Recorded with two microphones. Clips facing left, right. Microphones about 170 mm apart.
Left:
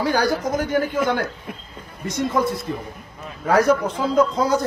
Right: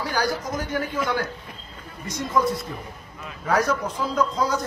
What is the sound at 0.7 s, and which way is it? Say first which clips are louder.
Speech: left 4 dB; 50° left (ahead or behind).